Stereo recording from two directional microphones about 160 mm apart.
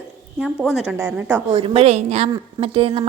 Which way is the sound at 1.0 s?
15° right (ahead or behind).